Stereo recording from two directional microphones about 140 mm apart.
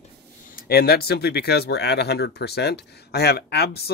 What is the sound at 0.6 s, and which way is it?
Speech, 90° left.